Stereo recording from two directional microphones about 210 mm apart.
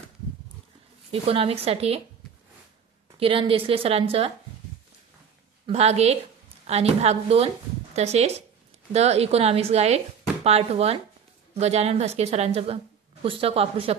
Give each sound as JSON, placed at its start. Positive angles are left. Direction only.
{"t": 1.1, "sound": "a woman's voice", "side_deg": -25}
{"t": 3.2, "sound": "a woman's voice", "side_deg": -25}
{"t": 5.7, "sound": "a woman's voice", "side_deg": -30}